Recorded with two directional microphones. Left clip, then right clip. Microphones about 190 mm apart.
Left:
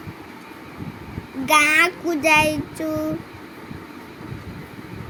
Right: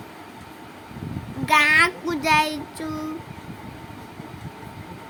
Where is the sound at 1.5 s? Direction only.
20° left (ahead or behind).